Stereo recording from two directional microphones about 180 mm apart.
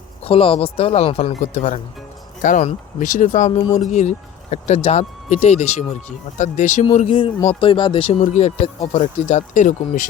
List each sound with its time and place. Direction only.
0.3 s speech: 30° left (ahead or behind)